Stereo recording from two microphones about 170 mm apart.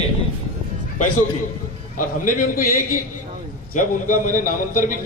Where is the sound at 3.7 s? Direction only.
50° left (ahead or behind).